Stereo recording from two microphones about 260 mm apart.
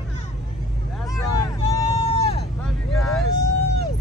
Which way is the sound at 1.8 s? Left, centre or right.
Left.